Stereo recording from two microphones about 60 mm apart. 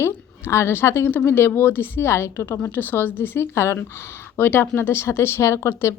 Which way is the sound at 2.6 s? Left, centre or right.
Left.